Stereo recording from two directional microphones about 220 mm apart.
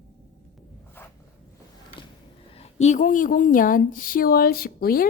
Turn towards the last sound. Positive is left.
turn(degrees=40)  # may be behind; listen again after turning